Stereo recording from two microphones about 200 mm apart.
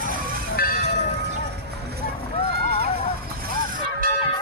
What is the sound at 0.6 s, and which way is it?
Vehicle, 50° left (ahead or behind).